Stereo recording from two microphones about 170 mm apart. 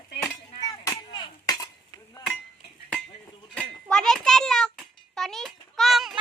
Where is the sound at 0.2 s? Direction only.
20° left (ahead or behind).